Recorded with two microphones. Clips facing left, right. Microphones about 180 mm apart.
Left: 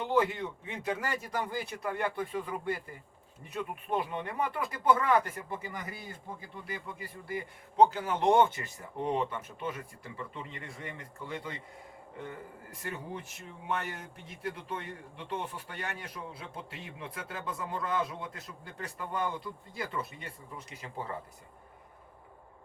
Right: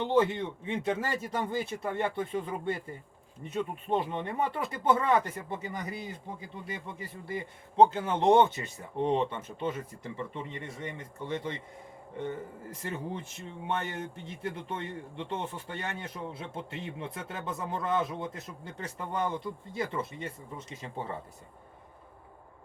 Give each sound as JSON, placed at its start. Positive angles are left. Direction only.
{"t": 0.0, "sound": "a man's voice", "side_deg": -25}